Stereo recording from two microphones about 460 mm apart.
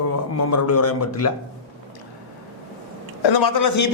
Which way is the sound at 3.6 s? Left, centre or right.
Left.